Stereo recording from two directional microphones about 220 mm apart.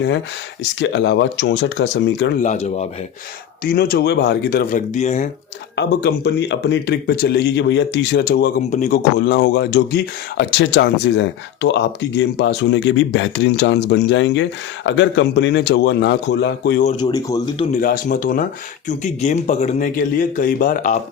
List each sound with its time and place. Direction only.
0.8 s speech: 55° left (ahead or behind)
2.4 s a man's voice: 30° left (ahead or behind)
3.6 s speech: 45° left (ahead or behind)
5.7 s speech: 50° left (ahead or behind)
17.0 s speech: 15° left (ahead or behind)
17.7 s a man's voice: 40° left (ahead or behind)